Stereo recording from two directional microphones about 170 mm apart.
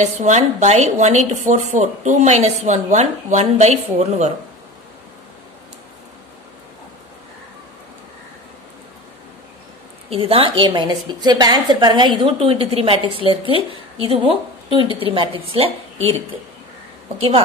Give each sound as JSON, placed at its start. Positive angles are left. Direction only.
{"t": 0.0, "sound": "speech", "side_deg": -45}
{"t": 10.0, "sound": "a woman's voice", "side_deg": -35}